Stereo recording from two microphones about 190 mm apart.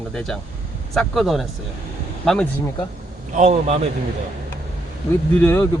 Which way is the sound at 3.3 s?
40° right (ahead or behind).